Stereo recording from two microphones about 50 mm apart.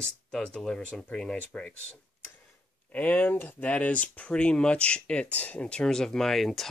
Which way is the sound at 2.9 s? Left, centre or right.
Left.